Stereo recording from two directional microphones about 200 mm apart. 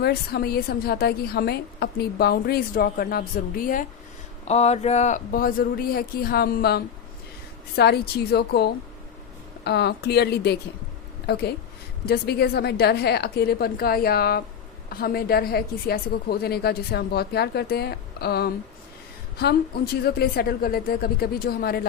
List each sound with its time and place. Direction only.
0.0 s a woman's voice: 50° left (ahead or behind)
4.4 s a woman's voice: 35° left (ahead or behind); by 21.8 s 50° left (ahead or behind)